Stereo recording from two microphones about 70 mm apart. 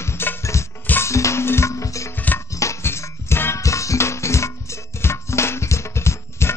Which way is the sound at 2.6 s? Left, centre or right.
Left.